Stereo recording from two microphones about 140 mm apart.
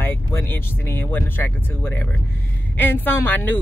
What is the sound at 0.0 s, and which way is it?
Speech, 15° left (ahead or behind).